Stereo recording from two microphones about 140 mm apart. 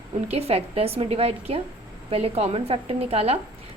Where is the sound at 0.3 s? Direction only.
45° right (ahead or behind).